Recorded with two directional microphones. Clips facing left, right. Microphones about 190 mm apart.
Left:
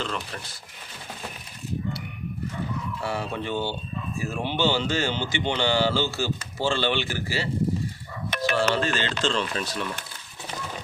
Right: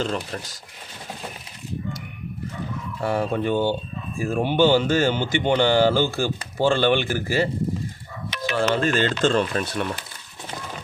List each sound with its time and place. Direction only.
0.0 s speech: 40° right (ahead or behind)
3.0 s speech: 50° right (ahead or behind)
8.3 s dog: 50° left (ahead or behind)
8.7 s speech: 50° right (ahead or behind)